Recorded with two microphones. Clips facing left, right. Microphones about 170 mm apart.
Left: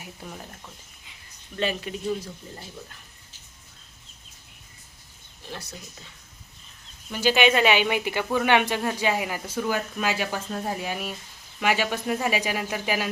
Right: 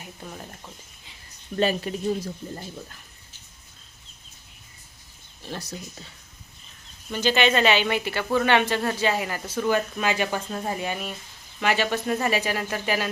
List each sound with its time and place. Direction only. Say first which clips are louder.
0.0 s speech: right 1 dB; 5° left (ahead or behind)
1.5 s speech: right 4 dB; 40° right (ahead or behind)
7.1 s speech: left 1 dB; 10° left (ahead or behind)